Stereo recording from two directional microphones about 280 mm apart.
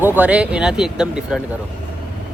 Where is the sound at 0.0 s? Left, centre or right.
Centre.